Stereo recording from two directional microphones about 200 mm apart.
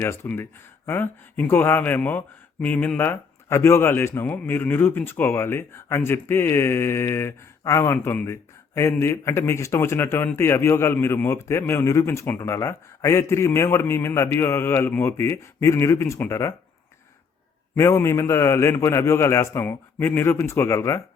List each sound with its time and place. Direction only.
0.0 s speech: 10° left (ahead or behind)
17.7 s speech: 15° left (ahead or behind)